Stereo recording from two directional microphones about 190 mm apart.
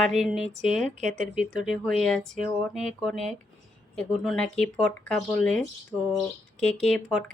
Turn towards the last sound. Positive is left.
turn(degrees=5)  # may be behind; listen again after turning